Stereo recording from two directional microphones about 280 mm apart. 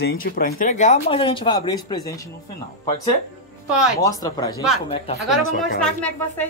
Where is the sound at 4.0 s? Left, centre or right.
Centre.